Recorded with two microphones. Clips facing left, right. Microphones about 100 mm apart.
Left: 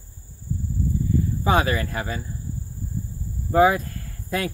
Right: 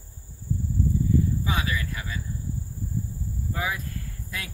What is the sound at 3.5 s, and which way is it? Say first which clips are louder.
Speech: left 14 dB; 45° left (ahead or behind).